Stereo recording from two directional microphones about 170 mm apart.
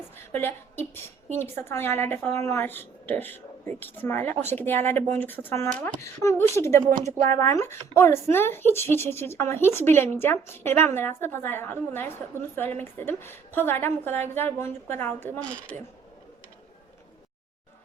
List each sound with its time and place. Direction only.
0.3 s speech: 10° left (ahead or behind)